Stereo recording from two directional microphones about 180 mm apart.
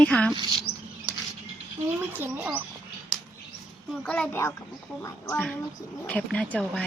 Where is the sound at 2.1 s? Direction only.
10° right (ahead or behind).